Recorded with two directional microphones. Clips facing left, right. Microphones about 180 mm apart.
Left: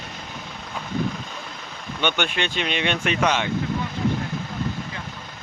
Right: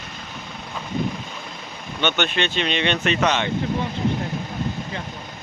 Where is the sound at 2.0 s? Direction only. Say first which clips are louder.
Right 2 dB; 10° left (ahead or behind).